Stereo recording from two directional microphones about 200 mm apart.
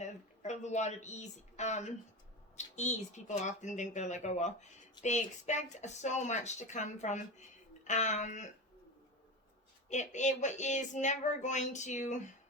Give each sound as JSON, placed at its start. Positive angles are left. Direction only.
{"t": 0.0, "sound": "speech", "side_deg": 35}
{"t": 9.9, "sound": "speech", "side_deg": 35}